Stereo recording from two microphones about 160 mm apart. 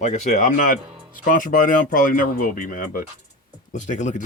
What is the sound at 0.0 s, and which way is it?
Speech, 45° left (ahead or behind).